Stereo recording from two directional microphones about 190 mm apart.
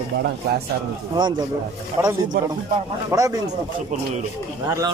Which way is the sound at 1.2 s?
25° right (ahead or behind).